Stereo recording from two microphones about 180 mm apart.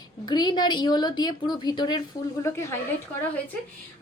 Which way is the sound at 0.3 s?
25° left (ahead or behind).